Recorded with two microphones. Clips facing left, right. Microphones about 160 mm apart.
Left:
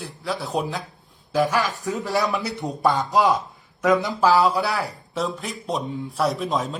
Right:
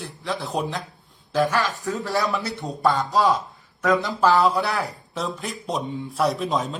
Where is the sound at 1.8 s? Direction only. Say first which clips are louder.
Left 1 dB; 15° left (ahead or behind).